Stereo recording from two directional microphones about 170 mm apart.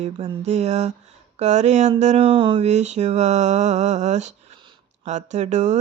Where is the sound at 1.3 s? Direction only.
40° right (ahead or behind).